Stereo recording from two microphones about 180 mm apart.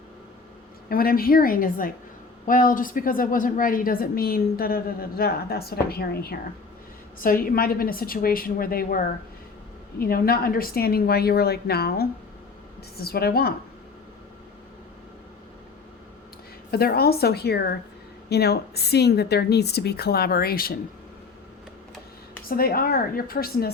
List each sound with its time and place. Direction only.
0.9 s a woman's voice: 55° left (ahead or behind)
10.0 s a woman's voice: 55° left (ahead or behind)
16.7 s a woman's voice: 60° left (ahead or behind)
22.4 s a woman's voice: 55° left (ahead or behind)